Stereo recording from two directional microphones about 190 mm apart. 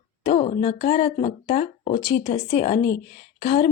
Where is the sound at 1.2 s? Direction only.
25° left (ahead or behind).